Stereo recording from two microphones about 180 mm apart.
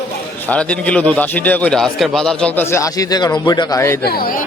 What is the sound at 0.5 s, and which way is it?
A man's voice, 5° left (ahead or behind).